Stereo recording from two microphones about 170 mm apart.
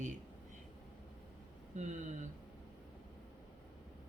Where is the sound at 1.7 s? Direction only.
45° right (ahead or behind).